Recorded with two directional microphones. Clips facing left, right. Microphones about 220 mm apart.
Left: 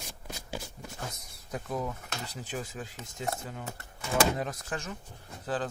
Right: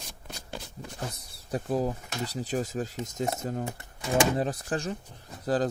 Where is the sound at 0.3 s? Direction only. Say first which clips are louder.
Left 1 dB; 10° left (ahead or behind).